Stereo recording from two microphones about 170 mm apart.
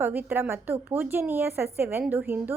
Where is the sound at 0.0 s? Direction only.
10° right (ahead or behind).